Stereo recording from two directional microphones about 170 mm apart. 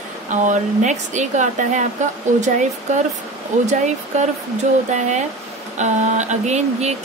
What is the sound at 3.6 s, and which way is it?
Speech, 45° right (ahead or behind).